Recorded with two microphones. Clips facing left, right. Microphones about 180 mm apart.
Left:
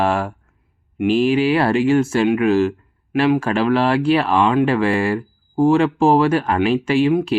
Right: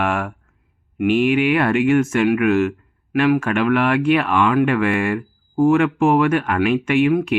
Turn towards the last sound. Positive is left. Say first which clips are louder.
# even
turn(degrees=30)  # may be behind; listen again after turning